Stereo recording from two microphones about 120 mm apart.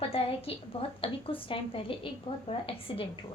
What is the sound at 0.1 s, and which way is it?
A woman's voice, 55° left (ahead or behind).